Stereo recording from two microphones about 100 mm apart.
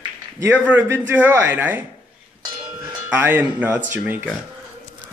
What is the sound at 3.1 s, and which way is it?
Speech, 20° right (ahead or behind).